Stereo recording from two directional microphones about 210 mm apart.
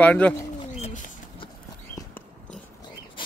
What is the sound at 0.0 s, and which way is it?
Speech, 5° left (ahead or behind).